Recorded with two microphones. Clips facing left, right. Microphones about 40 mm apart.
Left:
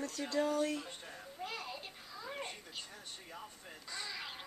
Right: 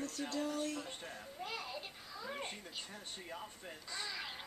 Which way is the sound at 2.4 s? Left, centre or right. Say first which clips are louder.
Even; centre.